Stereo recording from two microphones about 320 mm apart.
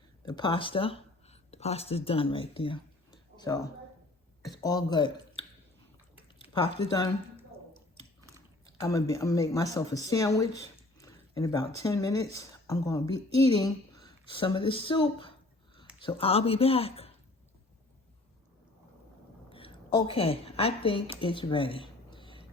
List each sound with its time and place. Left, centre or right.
0.3 s speech: centre
6.2 s a sound: centre
8.8 s speech: centre
10.6 s a sound: centre
11.8 s speech: centre
19.5 s a woman's voice: centre